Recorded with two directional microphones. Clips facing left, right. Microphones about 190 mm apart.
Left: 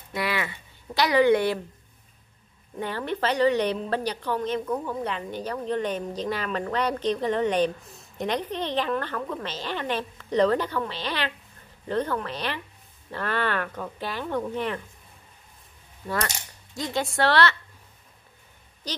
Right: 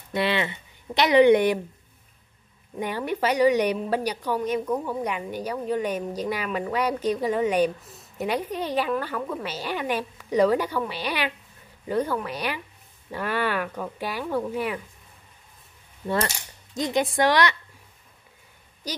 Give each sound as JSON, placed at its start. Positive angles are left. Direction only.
{"t": 0.1, "sound": "speech", "side_deg": -25}
{"t": 2.8, "sound": "a woman's voice", "side_deg": -10}
{"t": 16.7, "sound": "a woman's voice", "side_deg": -20}